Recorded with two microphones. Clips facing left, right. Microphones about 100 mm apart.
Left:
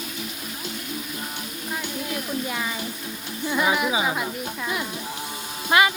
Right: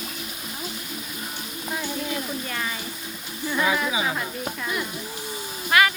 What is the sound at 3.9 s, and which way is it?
Speech, 15° left (ahead or behind).